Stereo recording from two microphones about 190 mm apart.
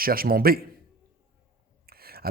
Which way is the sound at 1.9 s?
55° right (ahead or behind).